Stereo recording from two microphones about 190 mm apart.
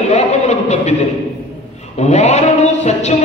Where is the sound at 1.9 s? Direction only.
40° left (ahead or behind).